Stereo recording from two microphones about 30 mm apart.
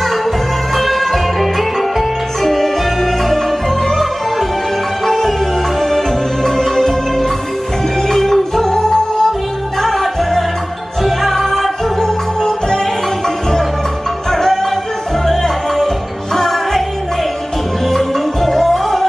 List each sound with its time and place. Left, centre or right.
0.0 s music: centre; by 9.3 s left
9.8 s music: centre
12.0 s music: left
14.3 s music: centre
17.9 s music: centre